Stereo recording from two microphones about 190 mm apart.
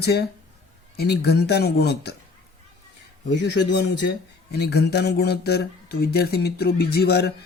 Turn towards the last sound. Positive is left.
turn(degrees=55)  # may be behind; listen again after turning